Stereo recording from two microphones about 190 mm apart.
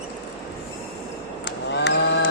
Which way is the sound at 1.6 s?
65° left (ahead or behind).